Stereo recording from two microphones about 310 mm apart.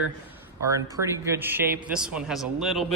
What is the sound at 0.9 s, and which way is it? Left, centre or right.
Speech, centre.